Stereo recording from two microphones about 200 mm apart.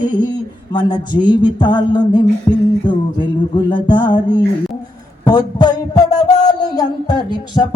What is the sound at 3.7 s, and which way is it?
Music, 25° left (ahead or behind).